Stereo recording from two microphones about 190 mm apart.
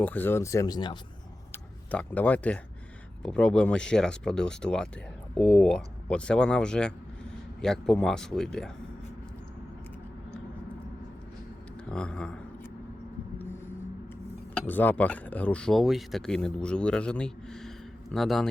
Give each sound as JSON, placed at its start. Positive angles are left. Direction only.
{"t": 0.0, "sound": "speech", "side_deg": 10}
{"t": 1.5, "sound": "speech", "side_deg": 5}
{"t": 11.9, "sound": "speech", "side_deg": 5}
{"t": 14.5, "sound": "speech", "side_deg": 10}